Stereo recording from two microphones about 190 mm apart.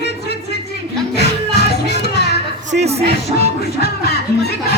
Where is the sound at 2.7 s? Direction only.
35° right (ahead or behind).